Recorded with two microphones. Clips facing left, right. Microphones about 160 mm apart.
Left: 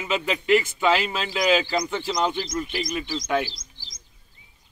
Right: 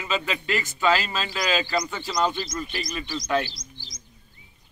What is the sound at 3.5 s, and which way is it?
Chirp, 90° left.